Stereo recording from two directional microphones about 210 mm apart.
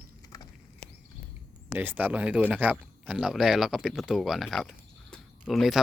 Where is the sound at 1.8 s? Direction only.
10° right (ahead or behind).